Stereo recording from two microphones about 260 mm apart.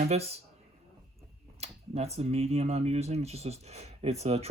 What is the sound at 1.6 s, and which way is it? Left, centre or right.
Speech, right.